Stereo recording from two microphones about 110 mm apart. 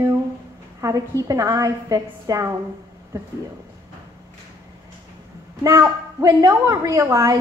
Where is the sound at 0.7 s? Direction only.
30° right (ahead or behind).